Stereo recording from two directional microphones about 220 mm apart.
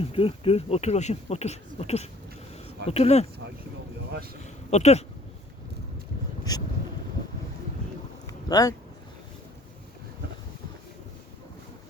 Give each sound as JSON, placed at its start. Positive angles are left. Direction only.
{"t": 0.0, "sound": "speech", "side_deg": 25}
{"t": 4.4, "sound": "speech", "side_deg": 30}
{"t": 6.5, "sound": "boat", "side_deg": 15}
{"t": 8.3, "sound": "a sound", "side_deg": 15}